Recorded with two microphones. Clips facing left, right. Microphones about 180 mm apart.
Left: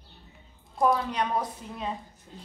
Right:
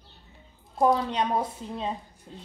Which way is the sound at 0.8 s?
25° right (ahead or behind).